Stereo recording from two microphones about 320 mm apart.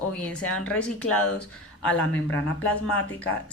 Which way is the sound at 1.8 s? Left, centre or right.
Centre.